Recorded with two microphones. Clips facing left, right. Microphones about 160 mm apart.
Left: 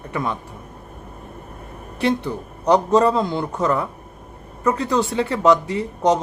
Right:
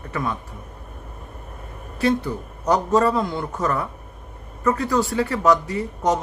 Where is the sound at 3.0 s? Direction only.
20° left (ahead or behind).